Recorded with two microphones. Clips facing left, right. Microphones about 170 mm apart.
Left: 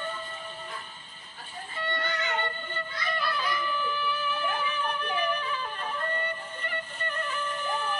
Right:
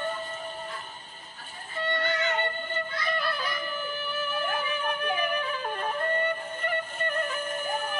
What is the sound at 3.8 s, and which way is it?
Music, 45° right (ahead or behind).